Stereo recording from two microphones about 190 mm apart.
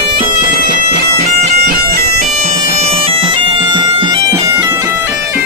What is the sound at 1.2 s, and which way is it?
Bagpipes, 45° right (ahead or behind).